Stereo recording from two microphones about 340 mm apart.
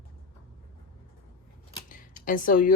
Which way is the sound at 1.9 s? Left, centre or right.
Left.